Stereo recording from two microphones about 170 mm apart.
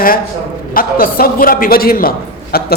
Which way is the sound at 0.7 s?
55° left (ahead or behind).